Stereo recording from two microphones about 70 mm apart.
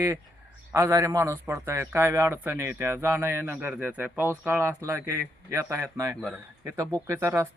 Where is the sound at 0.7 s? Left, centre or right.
Right.